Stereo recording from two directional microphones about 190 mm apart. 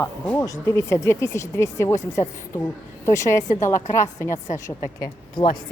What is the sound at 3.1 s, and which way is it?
Speech, 15° left (ahead or behind).